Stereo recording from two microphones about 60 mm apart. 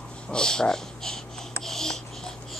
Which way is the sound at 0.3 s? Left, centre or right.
Centre.